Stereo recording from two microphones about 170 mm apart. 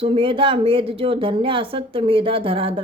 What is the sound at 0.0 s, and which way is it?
A woman's voice, 30° right (ahead or behind).